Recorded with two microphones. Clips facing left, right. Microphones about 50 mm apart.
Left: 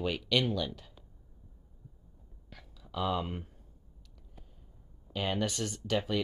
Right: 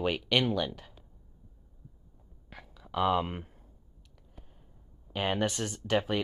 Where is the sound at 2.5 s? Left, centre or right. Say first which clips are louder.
Right 5 dB; right.